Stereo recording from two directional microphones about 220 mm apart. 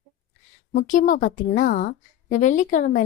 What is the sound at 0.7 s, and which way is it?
A woman's voice, 35° left (ahead or behind).